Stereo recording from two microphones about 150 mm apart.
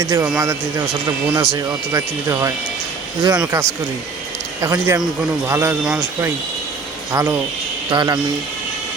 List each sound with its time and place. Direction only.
0.0 s a man's voice: 20° right (ahead or behind)
7.1 s speech: 20° right (ahead or behind)